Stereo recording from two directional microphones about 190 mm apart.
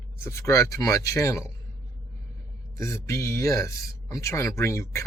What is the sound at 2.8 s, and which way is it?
Speech, 15° left (ahead or behind).